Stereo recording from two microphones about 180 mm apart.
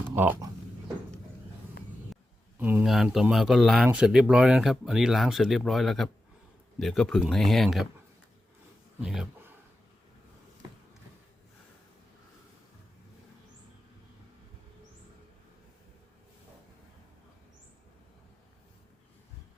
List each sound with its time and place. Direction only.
0.2 s speech: 10° right (ahead or behind)
2.6 s speech: 10° right (ahead or behind)
9.0 s a sound: 5° right (ahead or behind)